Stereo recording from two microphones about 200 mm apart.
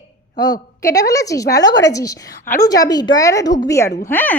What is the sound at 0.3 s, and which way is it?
A woman's voice, 20° left (ahead or behind).